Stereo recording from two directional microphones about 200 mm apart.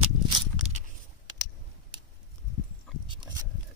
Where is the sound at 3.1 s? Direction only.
25° right (ahead or behind).